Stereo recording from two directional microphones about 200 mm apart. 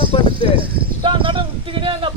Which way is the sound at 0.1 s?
30° left (ahead or behind).